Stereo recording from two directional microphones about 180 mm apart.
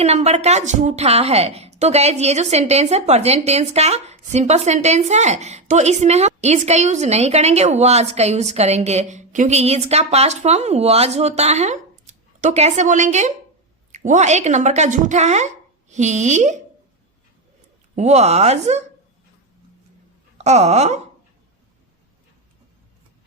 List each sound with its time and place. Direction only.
0.0 s a woman's voice: 35° right (ahead or behind)
17.9 s a woman's voice: 40° right (ahead or behind)
20.4 s a woman's voice: 40° right (ahead or behind)